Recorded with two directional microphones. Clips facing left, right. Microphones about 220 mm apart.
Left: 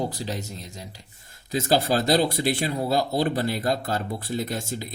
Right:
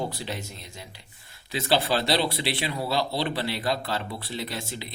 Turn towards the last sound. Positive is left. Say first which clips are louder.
# left 5 dB
turn(degrees=45)  # may be behind; listen again after turning